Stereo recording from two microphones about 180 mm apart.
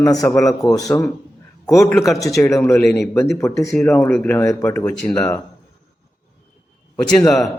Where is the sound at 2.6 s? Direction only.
15° left (ahead or behind).